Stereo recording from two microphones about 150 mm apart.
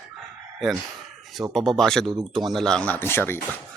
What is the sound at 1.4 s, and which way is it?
Speech, 10° right (ahead or behind).